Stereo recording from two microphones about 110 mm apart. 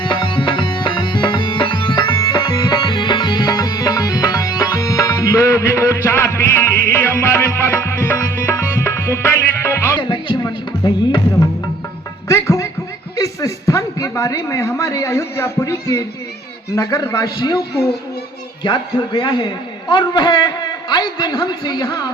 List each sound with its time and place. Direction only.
0.0 s music: 45° left (ahead or behind); by 10.0 s 25° left (ahead or behind)
10.0 s music: 45° left (ahead or behind)
12.3 s music: 25° left (ahead or behind)
13.1 s a man's voice: 30° left (ahead or behind)
18.6 s a man's voice: 40° left (ahead or behind)